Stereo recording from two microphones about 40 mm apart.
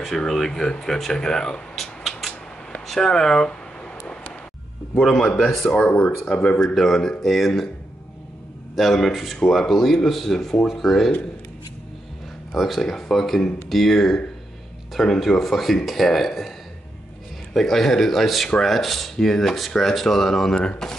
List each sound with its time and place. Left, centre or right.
0.1 s speech: centre
0.5 s speech: centre
1.8 s a sound: centre
2.9 s speech: centre
5.4 s speech: centre
5.8 s speech: left
6.2 s speech: left
6.6 s speech: centre
8.7 s speech: centre
12.5 s speech: centre
17.6 s speech: centre